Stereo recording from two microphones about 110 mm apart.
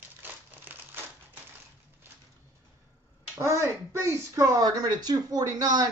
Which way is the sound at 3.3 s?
25° right (ahead or behind).